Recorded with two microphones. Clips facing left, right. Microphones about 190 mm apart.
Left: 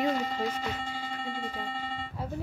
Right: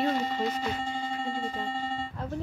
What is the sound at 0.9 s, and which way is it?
Music, 45° right (ahead or behind).